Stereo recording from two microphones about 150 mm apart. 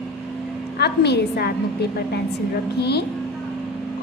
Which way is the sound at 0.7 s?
90° left.